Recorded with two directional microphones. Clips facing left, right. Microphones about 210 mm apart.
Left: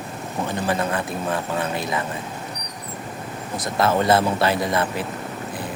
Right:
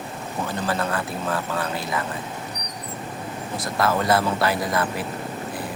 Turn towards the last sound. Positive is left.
turn(degrees=25)  # may be behind; listen again after turning